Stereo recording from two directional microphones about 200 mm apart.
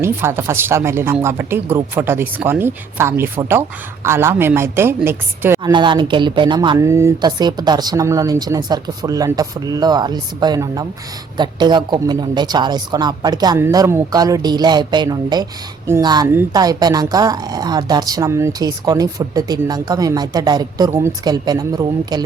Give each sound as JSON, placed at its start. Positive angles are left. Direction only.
{"t": 0.0, "sound": "speech", "side_deg": -10}
{"t": 5.7, "sound": "a woman's voice", "side_deg": -25}